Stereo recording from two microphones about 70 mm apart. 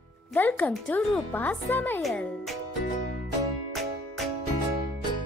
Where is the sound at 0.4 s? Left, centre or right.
Left.